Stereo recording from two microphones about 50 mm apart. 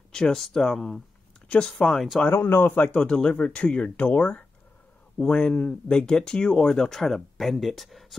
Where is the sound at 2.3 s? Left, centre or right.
Left.